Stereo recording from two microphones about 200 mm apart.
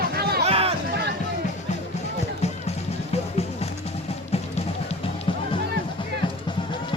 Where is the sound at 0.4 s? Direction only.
30° right (ahead or behind).